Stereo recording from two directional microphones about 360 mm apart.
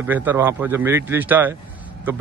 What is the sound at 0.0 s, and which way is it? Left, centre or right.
A man's voice, centre.